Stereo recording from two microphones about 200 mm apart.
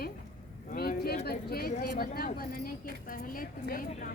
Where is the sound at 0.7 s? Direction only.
50° left (ahead or behind).